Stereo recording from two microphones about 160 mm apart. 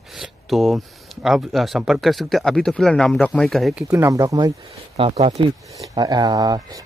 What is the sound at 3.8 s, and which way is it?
Speech, 20° right (ahead or behind).